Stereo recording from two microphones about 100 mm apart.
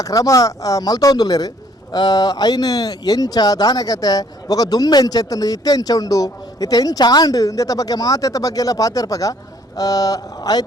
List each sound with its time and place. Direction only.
0.0 s speech: 35° left (ahead or behind)